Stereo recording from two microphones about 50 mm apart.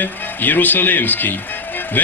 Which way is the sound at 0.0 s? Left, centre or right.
Left.